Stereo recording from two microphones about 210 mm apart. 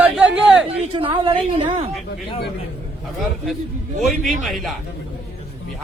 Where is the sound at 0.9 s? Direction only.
25° right (ahead or behind).